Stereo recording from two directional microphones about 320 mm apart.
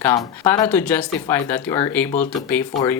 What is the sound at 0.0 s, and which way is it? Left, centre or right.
Speech, centre.